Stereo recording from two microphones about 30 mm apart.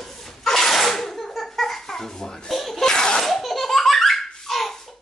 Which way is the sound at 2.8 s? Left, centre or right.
Left.